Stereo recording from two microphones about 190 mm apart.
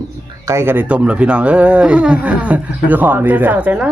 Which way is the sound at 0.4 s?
15° right (ahead or behind).